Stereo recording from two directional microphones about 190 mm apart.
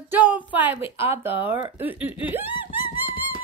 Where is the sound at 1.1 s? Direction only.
10° right (ahead or behind).